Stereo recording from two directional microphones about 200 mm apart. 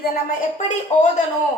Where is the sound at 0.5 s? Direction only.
35° left (ahead or behind).